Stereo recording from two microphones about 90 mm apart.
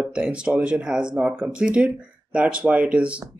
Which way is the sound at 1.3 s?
20° right (ahead or behind).